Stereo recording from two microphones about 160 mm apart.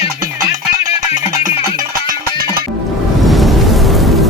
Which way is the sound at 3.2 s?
Centre (ahead or behind).